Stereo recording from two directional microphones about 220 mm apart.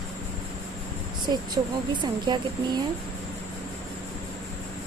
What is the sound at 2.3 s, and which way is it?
Speech, 20° right (ahead or behind).